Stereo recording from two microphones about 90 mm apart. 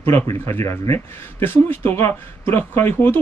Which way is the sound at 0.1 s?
25° left (ahead or behind).